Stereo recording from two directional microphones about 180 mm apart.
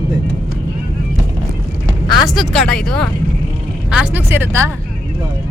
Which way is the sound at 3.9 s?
5° right (ahead or behind).